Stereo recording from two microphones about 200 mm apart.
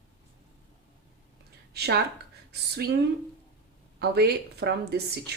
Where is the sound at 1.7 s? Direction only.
55° right (ahead or behind).